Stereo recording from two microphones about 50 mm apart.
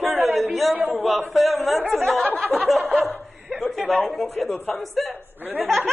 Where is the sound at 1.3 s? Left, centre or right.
Centre.